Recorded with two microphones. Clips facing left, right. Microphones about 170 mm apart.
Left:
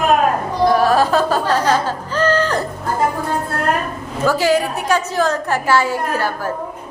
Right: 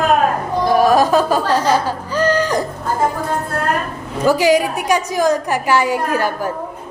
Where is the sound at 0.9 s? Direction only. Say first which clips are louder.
Right 2 dB; 15° right (ahead or behind).